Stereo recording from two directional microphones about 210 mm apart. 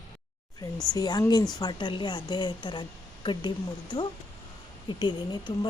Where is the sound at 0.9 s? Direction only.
15° left (ahead or behind).